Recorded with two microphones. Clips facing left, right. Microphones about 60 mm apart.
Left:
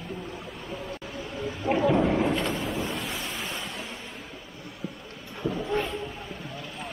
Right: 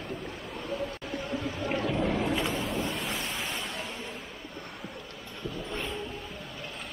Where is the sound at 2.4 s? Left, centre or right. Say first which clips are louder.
Left 2 dB; centre.